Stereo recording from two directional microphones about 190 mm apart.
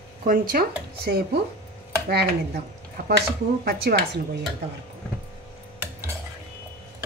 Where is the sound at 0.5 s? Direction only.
50° right (ahead or behind).